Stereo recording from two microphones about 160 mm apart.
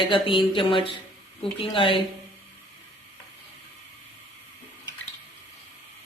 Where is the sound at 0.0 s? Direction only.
30° left (ahead or behind).